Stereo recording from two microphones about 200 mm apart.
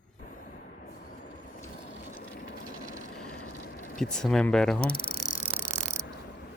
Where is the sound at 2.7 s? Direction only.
40° right (ahead or behind).